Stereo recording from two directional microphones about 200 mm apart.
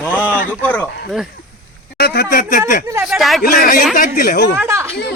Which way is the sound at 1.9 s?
50° left (ahead or behind).